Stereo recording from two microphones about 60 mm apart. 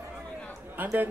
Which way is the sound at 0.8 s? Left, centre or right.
Right.